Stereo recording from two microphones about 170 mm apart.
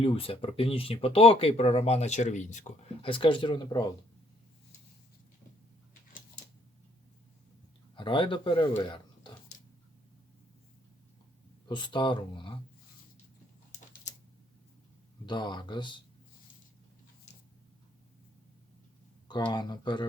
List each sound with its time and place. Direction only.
0.0 s speech: 35° left (ahead or behind)
3.0 s speech: 30° left (ahead or behind)
7.9 s speech: 30° left (ahead or behind)
11.7 s speech: 25° left (ahead or behind)
15.3 s speech: 25° left (ahead or behind)
19.5 s speech: 25° left (ahead or behind)